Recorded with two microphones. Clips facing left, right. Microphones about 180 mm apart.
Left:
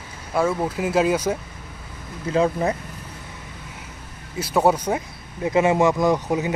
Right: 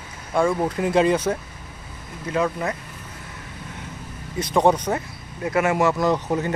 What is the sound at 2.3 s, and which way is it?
Speech, 30° left (ahead or behind).